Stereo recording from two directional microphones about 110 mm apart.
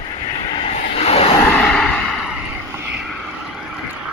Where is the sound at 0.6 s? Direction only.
65° left (ahead or behind).